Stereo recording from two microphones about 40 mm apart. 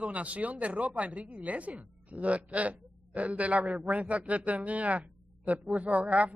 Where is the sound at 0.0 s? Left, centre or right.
Right.